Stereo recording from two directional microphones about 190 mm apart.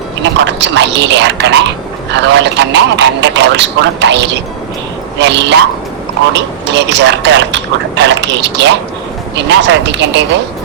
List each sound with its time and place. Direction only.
0.2 s a man's voice: 70° right (ahead or behind)